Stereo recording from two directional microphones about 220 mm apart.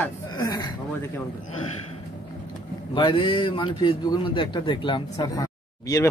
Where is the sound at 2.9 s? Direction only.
20° left (ahead or behind).